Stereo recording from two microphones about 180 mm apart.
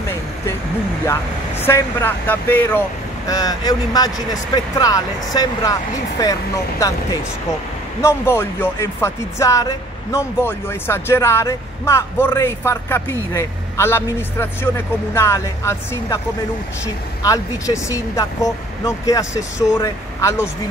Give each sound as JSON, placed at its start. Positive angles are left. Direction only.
{"t": 1.0, "sound": "speech", "side_deg": 15}
{"t": 8.0, "sound": "speech", "side_deg": 15}